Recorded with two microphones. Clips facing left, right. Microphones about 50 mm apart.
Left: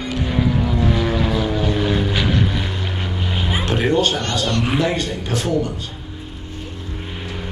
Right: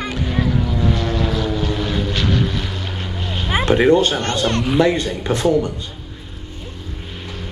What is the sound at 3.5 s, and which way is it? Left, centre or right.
Speech, right.